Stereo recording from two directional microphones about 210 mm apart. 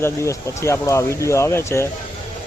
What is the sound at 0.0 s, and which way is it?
Speech, 15° left (ahead or behind).